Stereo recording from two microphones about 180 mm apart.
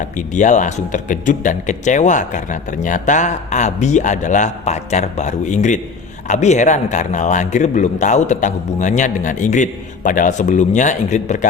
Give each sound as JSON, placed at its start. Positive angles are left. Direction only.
{"t": 0.0, "sound": "speech", "side_deg": 45}